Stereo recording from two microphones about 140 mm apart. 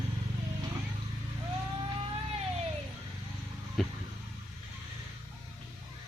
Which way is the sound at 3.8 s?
Centre (ahead or behind).